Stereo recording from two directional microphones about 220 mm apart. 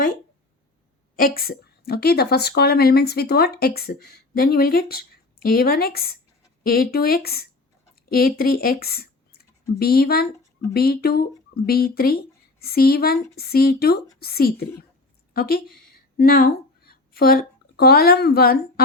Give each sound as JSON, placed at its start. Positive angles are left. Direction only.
{"t": 1.1, "sound": "speech", "side_deg": 40}